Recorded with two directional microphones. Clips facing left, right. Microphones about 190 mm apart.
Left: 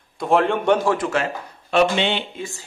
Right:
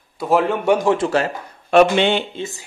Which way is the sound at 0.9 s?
30° right (ahead or behind).